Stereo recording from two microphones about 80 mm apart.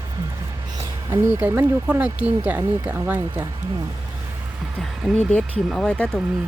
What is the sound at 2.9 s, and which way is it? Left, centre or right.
Speech, right.